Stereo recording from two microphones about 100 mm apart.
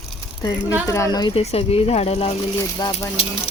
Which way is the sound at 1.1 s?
45° left (ahead or behind).